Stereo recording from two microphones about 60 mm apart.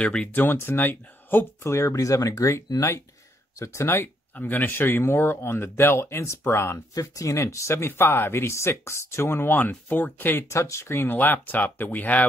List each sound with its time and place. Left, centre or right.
0.0 s speech: centre
0.3 s speech: left
1.6 s speech: left
3.8 s speech: left
4.3 s speech: left
6.9 s speech: left
10.5 s speech: left